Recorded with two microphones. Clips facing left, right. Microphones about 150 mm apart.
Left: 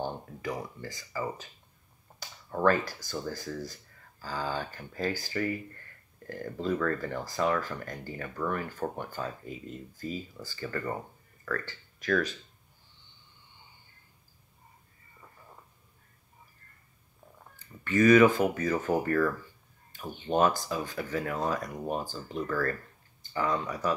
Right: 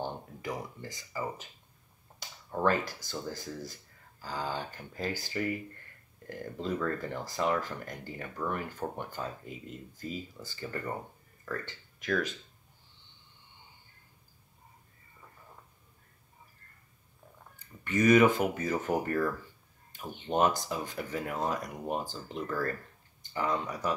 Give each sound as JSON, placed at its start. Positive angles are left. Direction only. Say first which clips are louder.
{"t": 0.0, "sound": "a sound", "louder": "left 2 dB", "side_deg": -20}
{"t": 2.1, "sound": "speech", "louder": "left 1 dB", "side_deg": -20}
{"t": 10.4, "sound": "speech", "louder": "left 4 dB", "side_deg": -20}
{"t": 17.8, "sound": "speech", "louder": "left 3 dB", "side_deg": -20}